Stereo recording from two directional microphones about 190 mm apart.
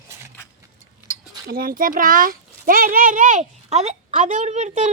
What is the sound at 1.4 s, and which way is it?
Speech, 50° right (ahead or behind).